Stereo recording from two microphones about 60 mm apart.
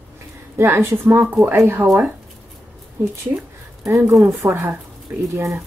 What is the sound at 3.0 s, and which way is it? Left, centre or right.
Speech, right.